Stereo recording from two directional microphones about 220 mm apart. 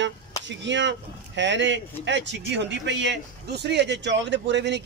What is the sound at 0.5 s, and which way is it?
Speech, 55° right (ahead or behind).